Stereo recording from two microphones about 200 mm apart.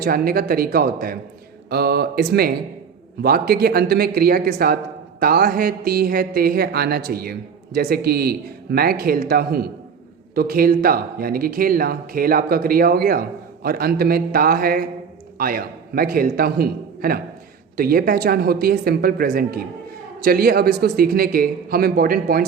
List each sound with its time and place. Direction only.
0.0 s a man's voice: 45° right (ahead or behind)